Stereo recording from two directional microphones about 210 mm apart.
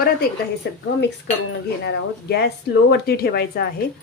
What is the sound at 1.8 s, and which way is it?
Speech, 55° left (ahead or behind).